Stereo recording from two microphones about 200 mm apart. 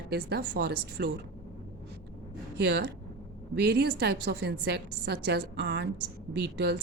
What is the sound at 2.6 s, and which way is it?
A woman's voice, 55° right (ahead or behind).